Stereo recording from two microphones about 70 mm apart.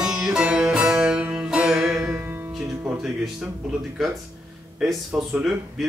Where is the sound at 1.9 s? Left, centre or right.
Right.